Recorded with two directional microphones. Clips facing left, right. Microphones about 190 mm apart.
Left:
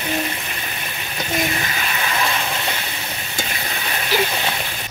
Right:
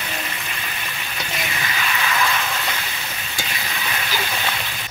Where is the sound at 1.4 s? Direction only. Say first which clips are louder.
Left 1 dB; 40° left (ahead or behind).